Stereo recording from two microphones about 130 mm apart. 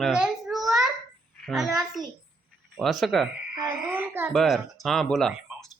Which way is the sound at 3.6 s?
15° right (ahead or behind).